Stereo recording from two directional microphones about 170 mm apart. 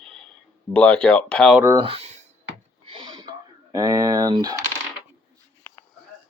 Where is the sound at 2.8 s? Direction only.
30° right (ahead or behind).